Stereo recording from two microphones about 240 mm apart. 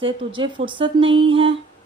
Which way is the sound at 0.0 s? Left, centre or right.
Right.